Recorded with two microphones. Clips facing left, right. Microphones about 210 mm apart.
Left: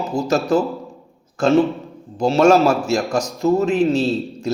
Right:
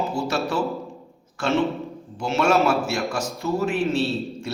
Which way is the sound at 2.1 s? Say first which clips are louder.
Left 7 dB; 35° left (ahead or behind).